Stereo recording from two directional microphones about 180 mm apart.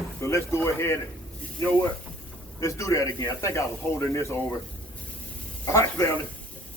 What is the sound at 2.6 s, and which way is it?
Speech, 15° left (ahead or behind).